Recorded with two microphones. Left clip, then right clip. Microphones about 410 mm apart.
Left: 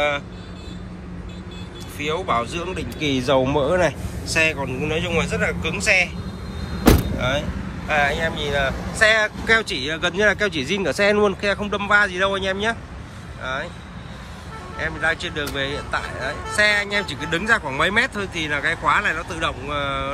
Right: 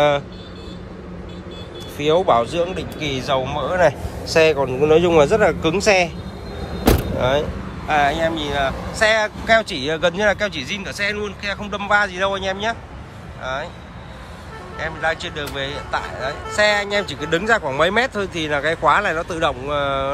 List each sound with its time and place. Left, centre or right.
2.0 s speech: centre
6.9 s vehicle: centre
7.9 s speech: centre
14.8 s speech: centre